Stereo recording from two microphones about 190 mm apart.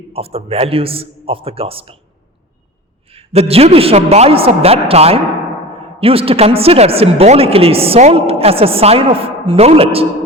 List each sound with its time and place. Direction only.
0.1 s a woman's voice: 30° right (ahead or behind)
3.1 s a woman's voice: 30° right (ahead or behind)